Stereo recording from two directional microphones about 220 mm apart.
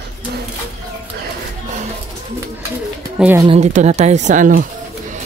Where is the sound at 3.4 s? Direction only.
30° right (ahead or behind).